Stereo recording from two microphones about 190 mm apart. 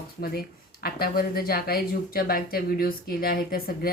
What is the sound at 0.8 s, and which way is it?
Speech, 50° left (ahead or behind).